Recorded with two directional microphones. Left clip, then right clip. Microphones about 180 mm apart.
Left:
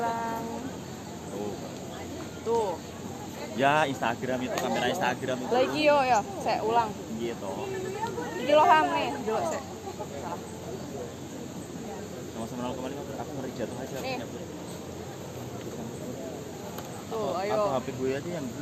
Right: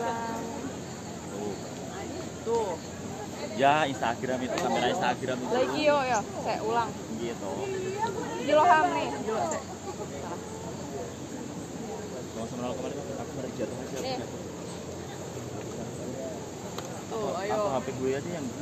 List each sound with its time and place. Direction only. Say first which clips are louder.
2.5 s vehicle: left 1 dB; 55° left (ahead or behind)
3.6 s speech: even; 55° left (ahead or behind)
8.4 s speech: left 1 dB; 55° left (ahead or behind)
17.3 s a sound: left 2 dB; 45° left (ahead or behind)